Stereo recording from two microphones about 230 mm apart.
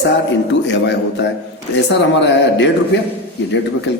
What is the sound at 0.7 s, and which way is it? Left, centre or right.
A man's voice, left.